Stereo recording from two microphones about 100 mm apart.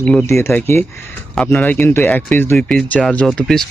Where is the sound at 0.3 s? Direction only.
25° left (ahead or behind).